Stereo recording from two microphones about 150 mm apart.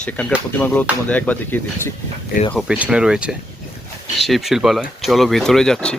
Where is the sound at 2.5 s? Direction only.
5° right (ahead or behind).